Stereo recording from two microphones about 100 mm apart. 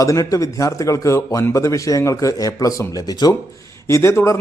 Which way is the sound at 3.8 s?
25° left (ahead or behind).